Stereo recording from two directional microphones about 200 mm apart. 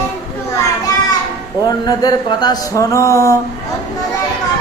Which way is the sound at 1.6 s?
20° left (ahead or behind).